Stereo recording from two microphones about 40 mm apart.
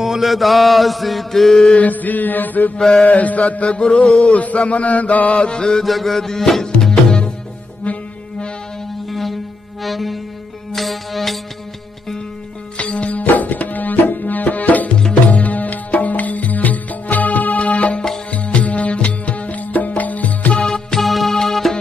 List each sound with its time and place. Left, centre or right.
0.0 s chant: centre
1.8 s mantra: left
2.9 s chant: left
5.4 s chant: left
5.9 s chant: centre
6.8 s music: centre
9.8 s music: centre
12.7 s music: left
20.6 s music: centre
21.0 s music: centre